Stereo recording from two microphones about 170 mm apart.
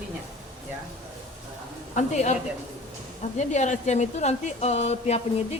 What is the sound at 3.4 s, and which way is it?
Speech, 45° left (ahead or behind).